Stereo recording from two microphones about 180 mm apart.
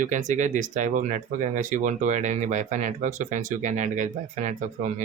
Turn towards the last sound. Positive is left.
turn(degrees=-45)  # may be behind; listen again after turning